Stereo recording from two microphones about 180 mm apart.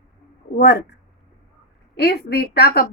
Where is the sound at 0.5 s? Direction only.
70° left (ahead or behind).